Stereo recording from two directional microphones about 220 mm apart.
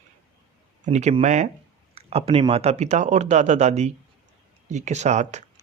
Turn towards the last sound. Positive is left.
turn(degrees=-30)  # may be behind; listen again after turning